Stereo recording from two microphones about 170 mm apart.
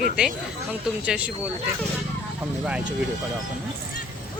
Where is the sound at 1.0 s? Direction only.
5° right (ahead or behind).